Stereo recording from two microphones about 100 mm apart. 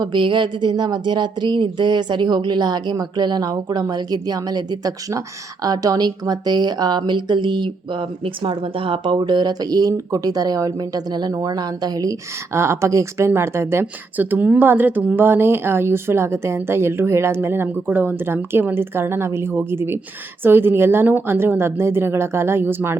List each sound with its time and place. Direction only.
0.0 s a woman's voice: 55° right (ahead or behind)
12.5 s a woman's voice: 25° right (ahead or behind)